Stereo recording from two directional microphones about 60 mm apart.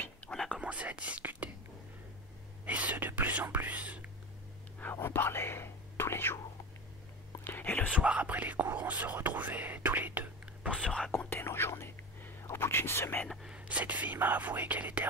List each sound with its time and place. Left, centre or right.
0.5 s whispering: centre
2.6 s whispering: right
5.0 s whispering: left
7.4 s whispering: left
7.9 s speech: right
11.1 s whispering: left
13.6 s speech: right